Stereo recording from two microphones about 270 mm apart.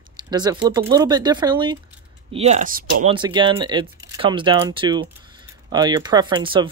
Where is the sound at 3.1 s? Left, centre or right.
Centre.